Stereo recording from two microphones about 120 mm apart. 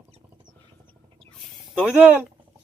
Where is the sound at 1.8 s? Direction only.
10° right (ahead or behind).